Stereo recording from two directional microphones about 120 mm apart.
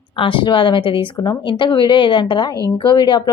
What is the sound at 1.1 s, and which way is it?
A woman's voice, 35° left (ahead or behind).